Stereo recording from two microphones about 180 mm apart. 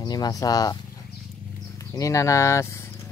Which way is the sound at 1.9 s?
20° left (ahead or behind).